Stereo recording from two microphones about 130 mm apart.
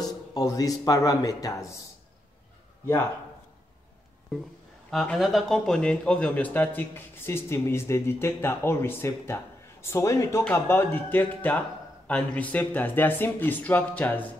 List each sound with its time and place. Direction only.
0.0 s speech: 30° left (ahead or behind)
4.9 s speech: 5° left (ahead or behind)